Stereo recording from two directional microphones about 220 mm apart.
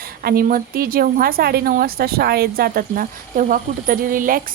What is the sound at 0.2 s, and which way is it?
Speech, 40° right (ahead or behind).